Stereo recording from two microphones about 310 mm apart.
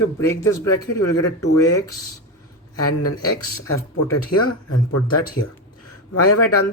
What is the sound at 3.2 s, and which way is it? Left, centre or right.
Speech, centre.